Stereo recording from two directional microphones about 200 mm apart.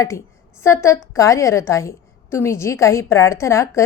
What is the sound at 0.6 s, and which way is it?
A woman's voice, 15° left (ahead or behind).